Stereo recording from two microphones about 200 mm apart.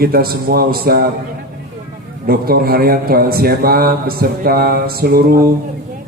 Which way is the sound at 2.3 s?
50° right (ahead or behind).